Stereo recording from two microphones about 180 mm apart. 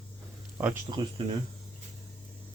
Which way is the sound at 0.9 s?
25° right (ahead or behind).